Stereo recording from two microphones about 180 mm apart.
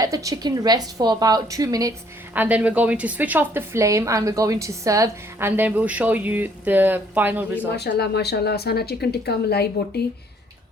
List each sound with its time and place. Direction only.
0.0 s a woman's voice: 20° right (ahead or behind)
2.3 s a woman's voice: 10° right (ahead or behind)
7.8 s speech: 65° left (ahead or behind)